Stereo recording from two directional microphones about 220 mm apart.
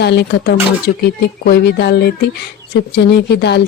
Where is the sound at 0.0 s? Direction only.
50° left (ahead or behind).